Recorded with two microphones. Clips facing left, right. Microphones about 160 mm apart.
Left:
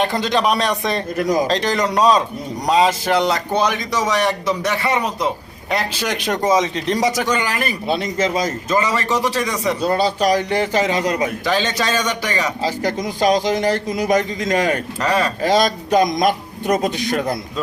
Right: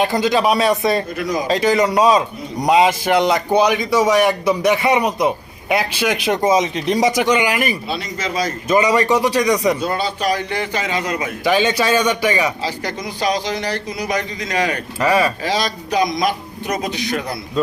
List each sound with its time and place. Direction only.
0.0 s speech: 5° right (ahead or behind)
1.1 s a man's voice: 45° left (ahead or behind)
1.5 s a man's voice: 5° right (ahead or behind)
7.9 s a man's voice: 50° left (ahead or behind)
8.7 s a man's voice: 15° right (ahead or behind)
9.8 s speech: 40° left (ahead or behind)
11.4 s a man's voice: 10° right (ahead or behind)
12.6 s a man's voice: 45° left (ahead or behind)
15.0 s a man's voice: 10° right (ahead or behind)
15.4 s a man's voice: 50° left (ahead or behind)